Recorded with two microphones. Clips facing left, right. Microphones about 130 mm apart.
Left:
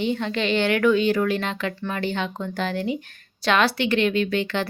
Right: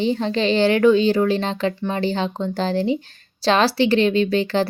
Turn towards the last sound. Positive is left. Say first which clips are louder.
# right 5 dB
turn(degrees=-35)  # may be behind; listen again after turning